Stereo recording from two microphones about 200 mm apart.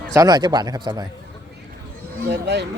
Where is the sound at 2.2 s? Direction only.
55° right (ahead or behind).